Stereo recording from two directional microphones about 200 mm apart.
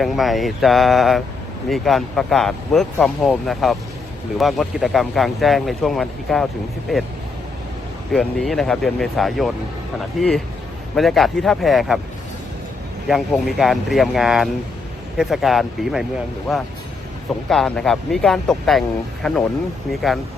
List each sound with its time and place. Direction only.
0.0 s speech: centre (ahead or behind)
8.1 s speech: 5° left (ahead or behind)
13.1 s speech: centre (ahead or behind)
17.5 s speech: centre (ahead or behind)